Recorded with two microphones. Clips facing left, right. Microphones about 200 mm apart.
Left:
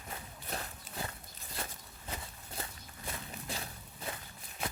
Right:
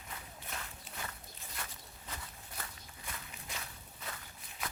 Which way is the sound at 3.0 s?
35° left (ahead or behind).